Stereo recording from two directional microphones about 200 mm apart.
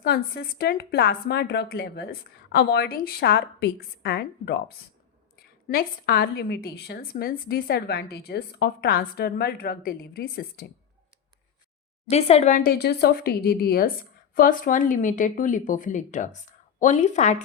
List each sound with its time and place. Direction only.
0.0 s a woman's voice: 50° left (ahead or behind)
5.6 s a woman's voice: 50° left (ahead or behind)
12.0 s a woman's voice: 30° left (ahead or behind)